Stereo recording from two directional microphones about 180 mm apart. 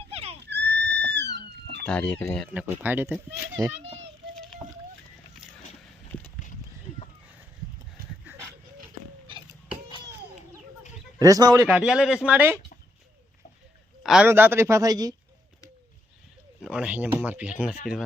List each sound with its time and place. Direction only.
0.1 s a sound: 35° right (ahead or behind)
0.5 s pig: 70° right (ahead or behind)
1.8 s speech: 5° left (ahead or behind)
2.5 s speech: 10° right (ahead or behind)
8.3 s a sound: 10° right (ahead or behind)
11.2 s a man's voice: 20° right (ahead or behind)
11.7 s a man's voice: 5° right (ahead or behind)
14.0 s a sound: centre (ahead or behind)
14.3 s speech: 10° right (ahead or behind)
16.6 s a man's voice: 5° right (ahead or behind)